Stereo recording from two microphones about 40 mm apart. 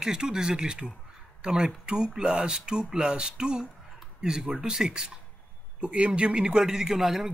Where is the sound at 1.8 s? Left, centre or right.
Right.